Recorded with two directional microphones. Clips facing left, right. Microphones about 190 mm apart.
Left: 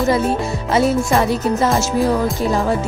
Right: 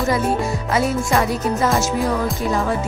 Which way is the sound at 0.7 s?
30° left (ahead or behind).